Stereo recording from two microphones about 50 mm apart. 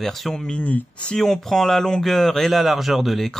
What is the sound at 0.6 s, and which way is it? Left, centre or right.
Speech, left.